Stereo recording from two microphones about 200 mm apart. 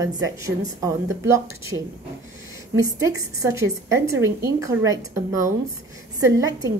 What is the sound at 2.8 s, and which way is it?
A woman's voice, 15° right (ahead or behind).